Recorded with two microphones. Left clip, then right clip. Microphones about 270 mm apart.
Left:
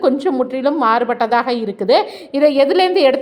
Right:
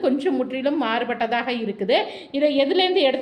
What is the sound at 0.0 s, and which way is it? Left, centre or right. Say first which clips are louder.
A woman's voice: left 6 dB; centre.